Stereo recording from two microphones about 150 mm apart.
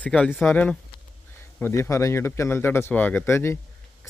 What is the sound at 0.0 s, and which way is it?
Speech, 10° left (ahead or behind).